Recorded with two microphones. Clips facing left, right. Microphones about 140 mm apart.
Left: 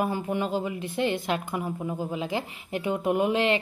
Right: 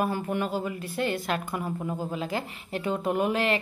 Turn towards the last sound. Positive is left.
turn(degrees=20)  # may be behind; listen again after turning